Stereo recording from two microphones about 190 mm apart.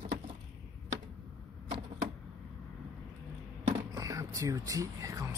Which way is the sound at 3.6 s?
25° right (ahead or behind).